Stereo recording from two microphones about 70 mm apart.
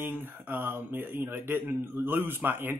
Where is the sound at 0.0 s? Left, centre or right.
Right.